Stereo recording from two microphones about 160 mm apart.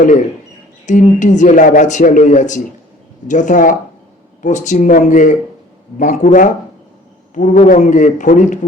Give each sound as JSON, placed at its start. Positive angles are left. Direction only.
{"t": 0.0, "sound": "speech", "side_deg": 50}